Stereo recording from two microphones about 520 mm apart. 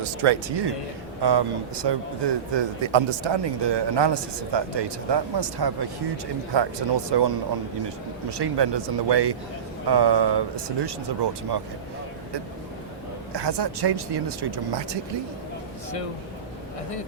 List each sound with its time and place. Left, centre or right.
0.0 s speech: right
1.2 s a man's voice: right
8.3 s a man's voice: right
13.3 s a man's voice: right